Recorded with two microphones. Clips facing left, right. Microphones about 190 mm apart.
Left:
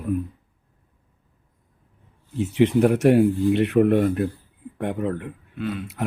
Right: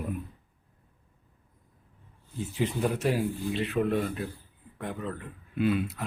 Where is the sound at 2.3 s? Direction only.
75° left (ahead or behind).